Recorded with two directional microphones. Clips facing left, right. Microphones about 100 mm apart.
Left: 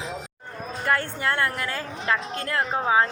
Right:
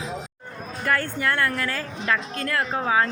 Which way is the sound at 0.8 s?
25° left (ahead or behind).